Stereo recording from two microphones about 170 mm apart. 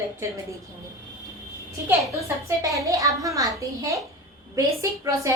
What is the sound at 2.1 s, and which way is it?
A woman's voice, 15° right (ahead or behind).